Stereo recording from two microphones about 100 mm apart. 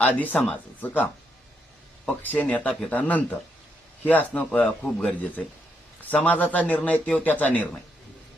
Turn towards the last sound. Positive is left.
turn(degrees=15)  # may be behind; listen again after turning